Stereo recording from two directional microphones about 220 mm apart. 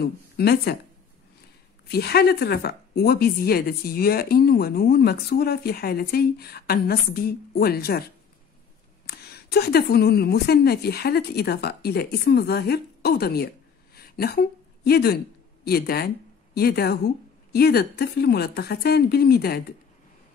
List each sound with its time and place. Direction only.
0.0 s speech: 45° left (ahead or behind)
1.9 s speech: 45° left (ahead or behind)
9.0 s speech: 45° left (ahead or behind)
13.9 s a sound: 45° left (ahead or behind)
15.6 s speech: 45° left (ahead or behind)